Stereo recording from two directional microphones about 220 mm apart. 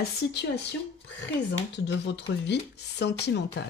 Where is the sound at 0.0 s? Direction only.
50° left (ahead or behind).